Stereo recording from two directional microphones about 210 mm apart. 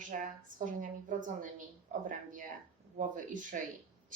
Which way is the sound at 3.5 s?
40° right (ahead or behind).